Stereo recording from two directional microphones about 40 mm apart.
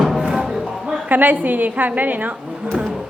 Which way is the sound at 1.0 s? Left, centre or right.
Right.